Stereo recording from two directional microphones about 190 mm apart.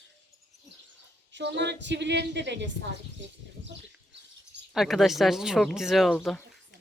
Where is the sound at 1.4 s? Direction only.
65° right (ahead or behind).